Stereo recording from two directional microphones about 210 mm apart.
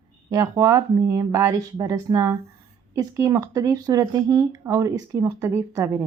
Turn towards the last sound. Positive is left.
turn(degrees=-15)  # may be behind; listen again after turning